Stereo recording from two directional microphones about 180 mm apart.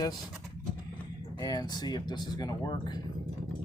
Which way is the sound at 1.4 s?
20° left (ahead or behind).